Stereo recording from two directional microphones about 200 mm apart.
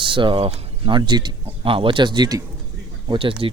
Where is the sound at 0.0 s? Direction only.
25° right (ahead or behind).